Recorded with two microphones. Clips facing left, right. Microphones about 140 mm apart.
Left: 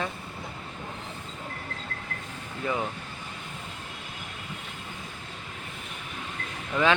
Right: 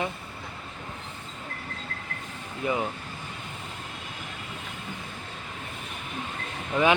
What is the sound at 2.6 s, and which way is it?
Speech, 20° right (ahead or behind).